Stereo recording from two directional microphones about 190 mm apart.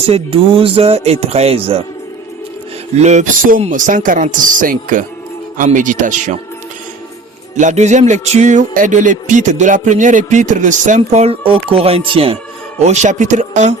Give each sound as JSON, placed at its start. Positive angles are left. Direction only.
{"t": 0.1, "sound": "music", "side_deg": -30}
{"t": 2.9, "sound": "speech", "side_deg": -35}
{"t": 7.5, "sound": "music", "side_deg": -40}